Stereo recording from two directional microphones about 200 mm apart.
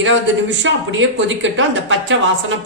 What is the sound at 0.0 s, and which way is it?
Speech, 65° right (ahead or behind).